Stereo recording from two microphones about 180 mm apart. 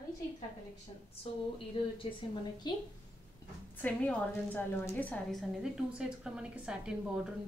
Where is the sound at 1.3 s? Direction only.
35° left (ahead or behind).